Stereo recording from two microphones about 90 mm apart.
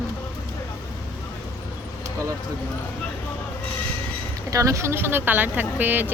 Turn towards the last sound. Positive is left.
turn(degrees=-20)  # may be behind; listen again after turning